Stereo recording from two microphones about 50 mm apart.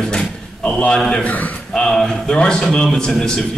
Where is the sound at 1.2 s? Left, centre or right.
Left.